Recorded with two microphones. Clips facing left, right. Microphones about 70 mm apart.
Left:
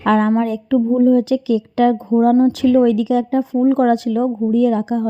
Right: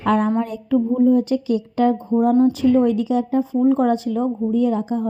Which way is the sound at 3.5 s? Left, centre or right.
Left.